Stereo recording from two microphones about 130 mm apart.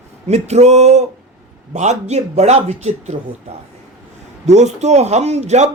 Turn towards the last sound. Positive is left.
turn(degrees=-60)  # may be behind; listen again after turning